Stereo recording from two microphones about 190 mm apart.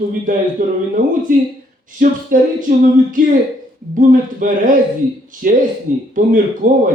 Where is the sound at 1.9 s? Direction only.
45° right (ahead or behind).